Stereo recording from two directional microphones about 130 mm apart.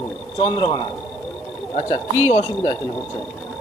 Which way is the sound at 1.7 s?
55° left (ahead or behind).